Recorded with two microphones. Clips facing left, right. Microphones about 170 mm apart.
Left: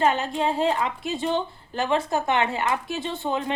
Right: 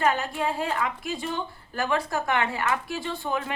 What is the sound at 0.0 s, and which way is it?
A woman's voice, 25° left (ahead or behind).